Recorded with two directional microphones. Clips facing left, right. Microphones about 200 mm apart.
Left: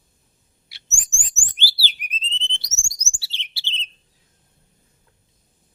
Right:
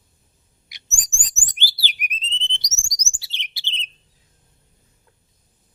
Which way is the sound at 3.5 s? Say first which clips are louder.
Left 1 dB; 15° right (ahead or behind).